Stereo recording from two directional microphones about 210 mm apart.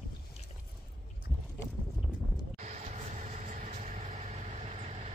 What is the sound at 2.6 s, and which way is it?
Vehicle, 35° right (ahead or behind).